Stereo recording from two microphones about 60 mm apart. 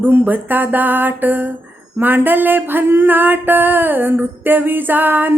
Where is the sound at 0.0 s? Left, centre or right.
Right.